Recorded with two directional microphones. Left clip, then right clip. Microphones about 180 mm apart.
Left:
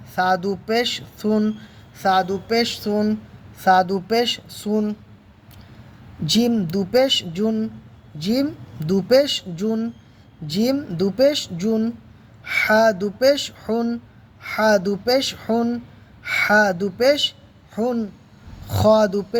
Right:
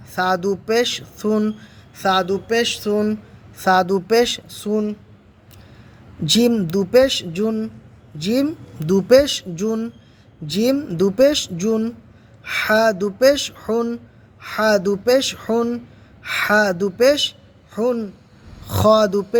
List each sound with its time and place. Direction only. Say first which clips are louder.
0.2 s speech: right 1 dB; 20° right (ahead or behind)
6.2 s speech: right 3 dB; 25° right (ahead or behind)